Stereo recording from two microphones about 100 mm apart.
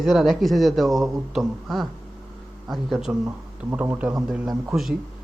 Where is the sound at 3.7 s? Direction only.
15° right (ahead or behind).